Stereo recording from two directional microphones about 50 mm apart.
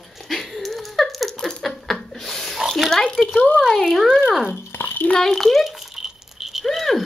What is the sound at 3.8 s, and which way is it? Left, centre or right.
Speech, centre.